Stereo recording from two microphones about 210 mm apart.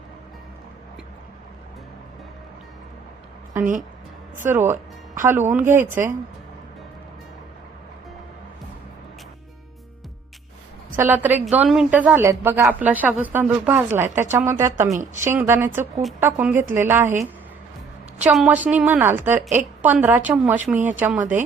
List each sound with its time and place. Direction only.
4.4 s speech: 10° right (ahead or behind)
10.9 s a woman's voice: 10° right (ahead or behind)
18.2 s a woman's voice: 5° right (ahead or behind)